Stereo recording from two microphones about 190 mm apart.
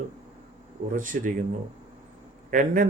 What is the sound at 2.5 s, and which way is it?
Speech, 45° right (ahead or behind).